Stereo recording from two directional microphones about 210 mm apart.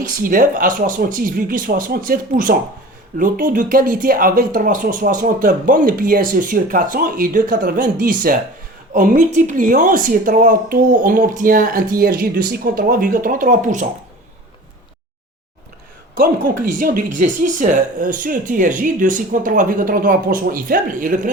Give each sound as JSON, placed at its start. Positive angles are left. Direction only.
{"t": 0.2, "sound": "speech", "side_deg": -40}
{"t": 16.1, "sound": "speech", "side_deg": -40}